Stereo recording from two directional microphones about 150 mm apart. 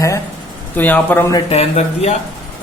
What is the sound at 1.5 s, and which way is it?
Speech, 45° left (ahead or behind).